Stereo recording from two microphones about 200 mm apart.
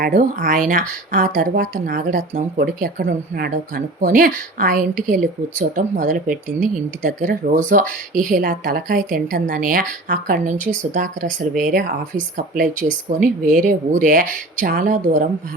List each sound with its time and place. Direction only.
0.0 s speech: 40° right (ahead or behind)